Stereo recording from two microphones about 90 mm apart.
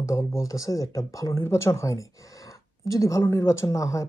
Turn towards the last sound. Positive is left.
turn(degrees=40)  # may be behind; listen again after turning